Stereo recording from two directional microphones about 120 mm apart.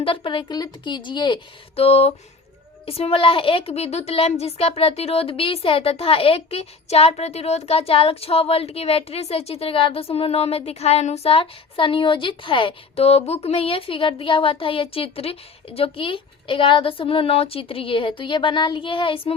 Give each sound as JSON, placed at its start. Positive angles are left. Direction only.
{"t": 0.0, "sound": "a woman's voice", "side_deg": 50}
{"t": 1.7, "sound": "a sound", "side_deg": 60}
{"t": 2.8, "sound": "a woman's voice", "side_deg": 55}